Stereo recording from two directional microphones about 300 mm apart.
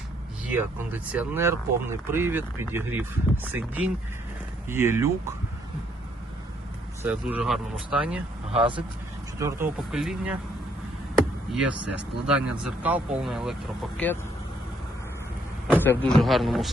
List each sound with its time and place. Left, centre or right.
0.5 s speech: centre
7.0 s speech: centre
8.5 s speech: centre
9.4 s speech: centre
11.5 s speech: centre
15.8 s speech: centre